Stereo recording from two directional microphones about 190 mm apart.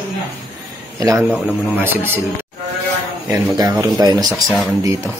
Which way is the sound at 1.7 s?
10° right (ahead or behind).